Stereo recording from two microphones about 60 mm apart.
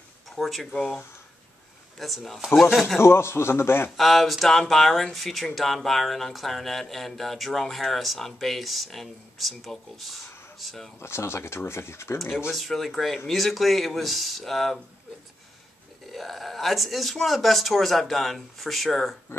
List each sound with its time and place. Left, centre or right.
0.4 s speech: centre
2.0 s speech: centre
3.0 s speech: left
3.9 s speech: centre
11.0 s speech: left
12.4 s speech: centre
16.1 s speech: centre